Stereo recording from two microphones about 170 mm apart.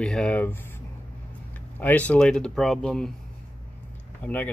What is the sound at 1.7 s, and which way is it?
Speech, 10° left (ahead or behind).